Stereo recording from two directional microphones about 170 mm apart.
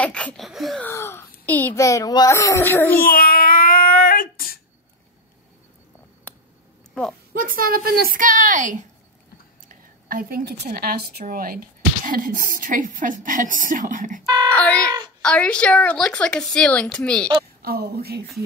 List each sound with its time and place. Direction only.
0.0 s a sound: 5° left (ahead or behind)
0.5 s a woman's voice: centre (ahead or behind)
0.8 s a child's voice: 15° left (ahead or behind)
3.1 s child singing: 60° left (ahead or behind)
7.3 s a woman's voice: 55° right (ahead or behind)
10.0 s a woman's voice: 60° right (ahead or behind)
14.2 s speech: 20° right (ahead or behind)
14.5 s a woman's voice: 10° left (ahead or behind)
17.6 s speech: 65° right (ahead or behind)